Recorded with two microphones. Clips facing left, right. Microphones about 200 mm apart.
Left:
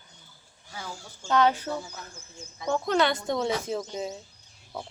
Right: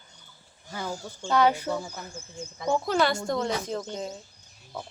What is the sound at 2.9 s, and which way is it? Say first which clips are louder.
Speech: left 2 dB; centre (ahead or behind).